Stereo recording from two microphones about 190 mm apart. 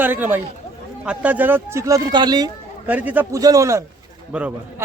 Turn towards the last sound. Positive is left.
turn(degrees=-5)  # may be behind; listen again after turning